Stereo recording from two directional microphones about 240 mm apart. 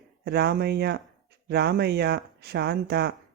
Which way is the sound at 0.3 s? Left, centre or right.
Right.